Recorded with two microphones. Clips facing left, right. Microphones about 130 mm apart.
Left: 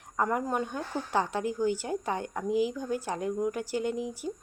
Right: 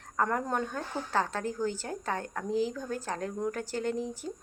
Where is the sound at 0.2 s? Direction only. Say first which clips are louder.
Left 1 dB; 10° left (ahead or behind).